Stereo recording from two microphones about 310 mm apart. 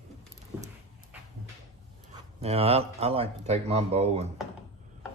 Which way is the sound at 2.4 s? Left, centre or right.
Centre.